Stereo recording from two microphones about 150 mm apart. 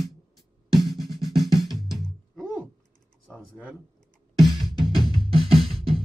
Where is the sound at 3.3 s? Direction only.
10° right (ahead or behind).